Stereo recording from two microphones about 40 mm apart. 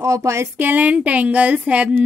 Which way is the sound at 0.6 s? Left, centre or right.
Right.